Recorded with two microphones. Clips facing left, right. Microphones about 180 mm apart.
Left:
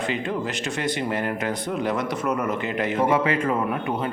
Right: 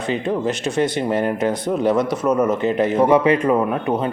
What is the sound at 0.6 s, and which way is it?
Speech, 20° right (ahead or behind).